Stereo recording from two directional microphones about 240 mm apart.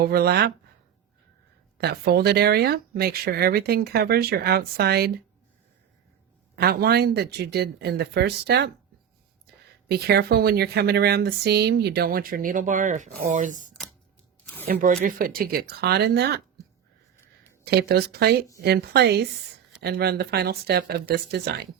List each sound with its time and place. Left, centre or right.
0.0 s speech: right
1.8 s speech: right
6.6 s speech: right
9.9 s speech: right
14.7 s speech: right
17.7 s speech: right